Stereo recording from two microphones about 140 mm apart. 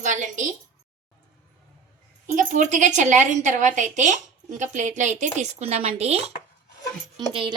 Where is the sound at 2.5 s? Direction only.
60° right (ahead or behind).